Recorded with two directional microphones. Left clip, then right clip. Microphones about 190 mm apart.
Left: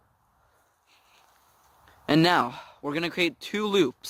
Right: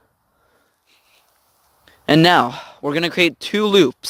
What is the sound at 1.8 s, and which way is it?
Speech, 40° right (ahead or behind).